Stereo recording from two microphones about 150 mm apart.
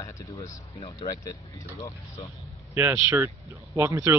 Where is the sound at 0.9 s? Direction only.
25° left (ahead or behind).